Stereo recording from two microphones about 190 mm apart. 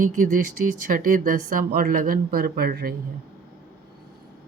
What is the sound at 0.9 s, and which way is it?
Speech, 45° right (ahead or behind).